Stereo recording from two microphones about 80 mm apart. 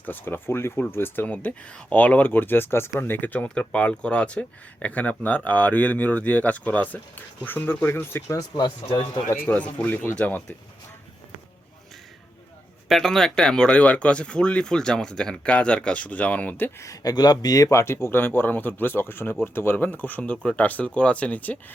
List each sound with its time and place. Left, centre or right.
0.0 s speech: left
12.9 s speech: centre; by 16.7 s left
16.8 s speech: left; by 21.6 s centre